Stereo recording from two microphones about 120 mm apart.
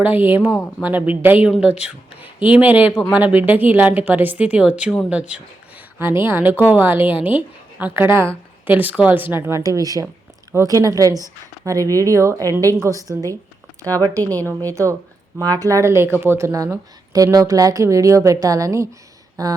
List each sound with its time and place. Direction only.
0.0 s speech: 15° right (ahead or behind)
6.0 s speech: 20° right (ahead or behind)
14.7 s speech: 25° right (ahead or behind)